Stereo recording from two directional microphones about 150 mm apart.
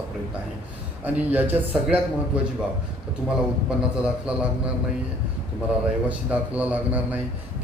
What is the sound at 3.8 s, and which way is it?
Speech, 5° right (ahead or behind).